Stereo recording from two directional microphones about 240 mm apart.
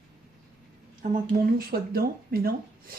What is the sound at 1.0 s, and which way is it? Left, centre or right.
Speech, right.